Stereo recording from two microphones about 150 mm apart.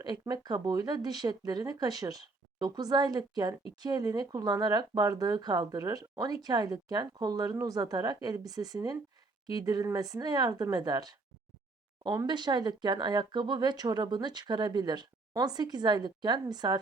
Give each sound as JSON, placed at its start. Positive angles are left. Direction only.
{"t": 0.0, "sound": "speech", "side_deg": -25}